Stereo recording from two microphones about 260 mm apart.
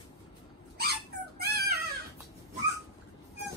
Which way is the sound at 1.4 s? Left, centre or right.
Right.